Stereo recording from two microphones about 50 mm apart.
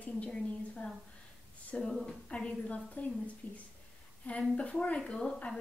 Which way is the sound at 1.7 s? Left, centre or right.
Left.